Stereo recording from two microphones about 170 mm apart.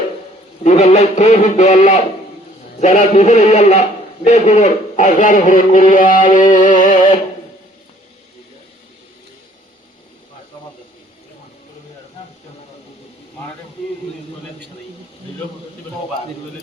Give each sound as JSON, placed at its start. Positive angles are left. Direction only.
{"t": 0.6, "sound": "a man's voice", "side_deg": 45}